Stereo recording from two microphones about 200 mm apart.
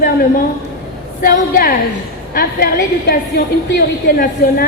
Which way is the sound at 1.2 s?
45° left (ahead or behind).